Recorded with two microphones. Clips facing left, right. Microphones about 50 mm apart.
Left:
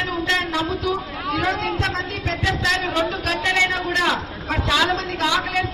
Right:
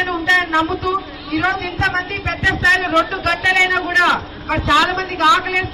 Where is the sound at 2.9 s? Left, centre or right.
Right.